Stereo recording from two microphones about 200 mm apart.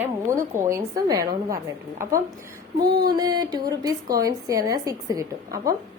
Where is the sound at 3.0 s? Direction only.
20° right (ahead or behind).